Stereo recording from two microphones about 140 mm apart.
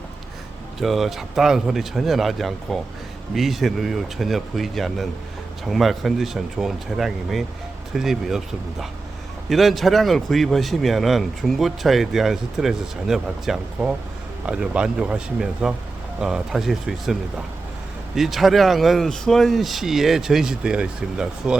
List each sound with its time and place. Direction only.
0.8 s a man's voice: centre (ahead or behind)
9.5 s a man's voice: centre (ahead or behind)